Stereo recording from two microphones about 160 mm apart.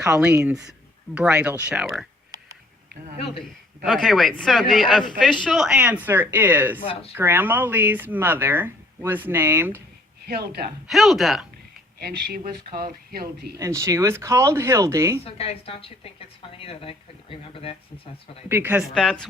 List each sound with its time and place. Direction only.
0.0 s speech: 5° right (ahead or behind)
3.8 s speech: centre (ahead or behind)
10.2 s speech: 80° right
10.8 s speech: centre (ahead or behind)
11.9 s speech: 75° right (ahead or behind)
13.6 s speech: 20° right (ahead or behind)
15.2 s speech: 35° left (ahead or behind)
18.4 s speech: 15° right (ahead or behind)
18.9 s speech: 5° left (ahead or behind)